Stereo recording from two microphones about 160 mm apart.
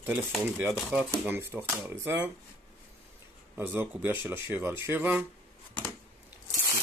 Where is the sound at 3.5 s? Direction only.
15° right (ahead or behind).